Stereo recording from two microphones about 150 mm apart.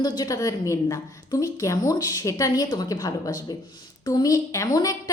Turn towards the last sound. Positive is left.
turn(degrees=25)  # may be behind; listen again after turning